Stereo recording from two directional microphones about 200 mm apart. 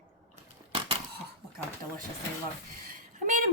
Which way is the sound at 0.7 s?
25° right (ahead or behind).